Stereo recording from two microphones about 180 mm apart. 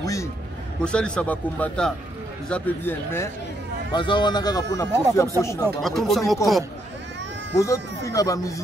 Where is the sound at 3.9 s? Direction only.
25° left (ahead or behind).